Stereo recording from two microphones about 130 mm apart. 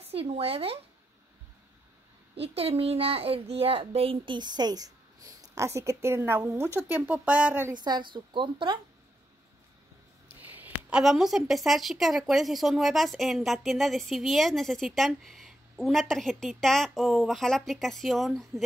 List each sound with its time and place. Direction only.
0.1 s speech: 50° right (ahead or behind)
2.4 s a child's voice: 50° right (ahead or behind); by 7.7 s 10° right (ahead or behind)
7.8 s a woman's voice: 35° right (ahead or behind)
10.4 s speech: 10° right (ahead or behind)